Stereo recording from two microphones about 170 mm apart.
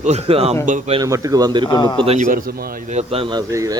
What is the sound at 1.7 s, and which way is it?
Speech, 25° left (ahead or behind).